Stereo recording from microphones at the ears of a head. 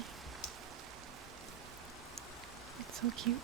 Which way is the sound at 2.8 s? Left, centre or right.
Right.